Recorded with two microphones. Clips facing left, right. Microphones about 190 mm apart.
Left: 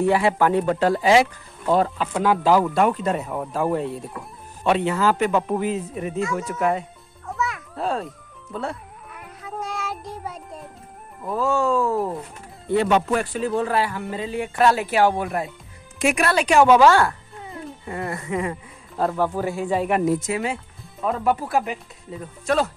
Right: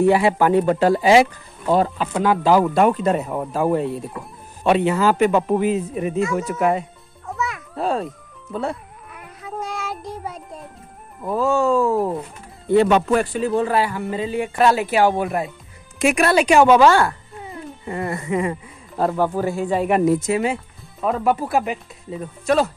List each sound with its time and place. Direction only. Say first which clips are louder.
0.0 s a man's voice: right 3 dB; 15° right (ahead or behind)
1.8 s speech: right 2 dB; centre (ahead or behind)
2.6 s speech: right 3 dB; 20° right (ahead or behind)
3.3 s a man's voice: right 3 dB; 5° right (ahead or behind)
7.3 s music: even; centre (ahead or behind)
7.7 s a child's voice: right 5 dB; 15° right (ahead or behind)
9.1 s child singing: right 2 dB; centre (ahead or behind)
11.3 s a man's voice: right 3 dB; 15° right (ahead or behind)
13.3 s speech: right 3 dB; 5° right (ahead or behind)
16.3 s a man's voice: right 4 dB; 15° right (ahead or behind)
16.5 s speech: even; centre (ahead or behind)
19.9 s a man's voice: right 4 dB; 25° right (ahead or behind)